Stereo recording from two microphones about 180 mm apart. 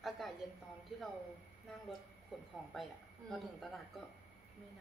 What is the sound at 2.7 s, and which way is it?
A man's voice, centre (ahead or behind).